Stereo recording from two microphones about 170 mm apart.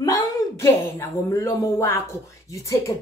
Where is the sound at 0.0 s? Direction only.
20° left (ahead or behind).